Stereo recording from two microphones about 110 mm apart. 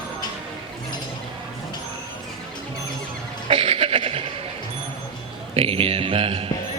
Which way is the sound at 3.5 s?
55° right (ahead or behind).